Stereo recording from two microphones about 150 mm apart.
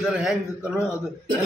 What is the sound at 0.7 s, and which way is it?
Speech, 15° left (ahead or behind).